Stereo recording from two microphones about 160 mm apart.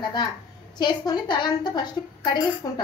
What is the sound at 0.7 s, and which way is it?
A woman's voice, 25° left (ahead or behind).